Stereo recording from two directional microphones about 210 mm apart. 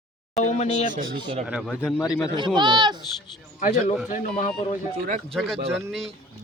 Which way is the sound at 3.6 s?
40° left (ahead or behind).